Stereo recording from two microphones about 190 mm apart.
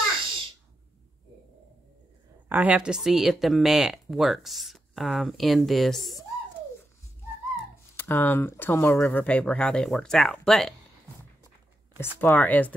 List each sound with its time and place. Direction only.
0.2 s a sound: 25° right (ahead or behind)
2.4 s speech: 10° right (ahead or behind)
7.9 s speech: 10° left (ahead or behind)
12.2 s speech: 10° left (ahead or behind)